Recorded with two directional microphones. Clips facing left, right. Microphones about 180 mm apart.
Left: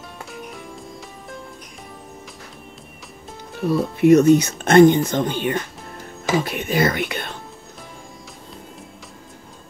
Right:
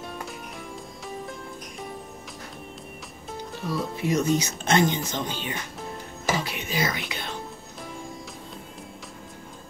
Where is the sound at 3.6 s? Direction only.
60° left (ahead or behind).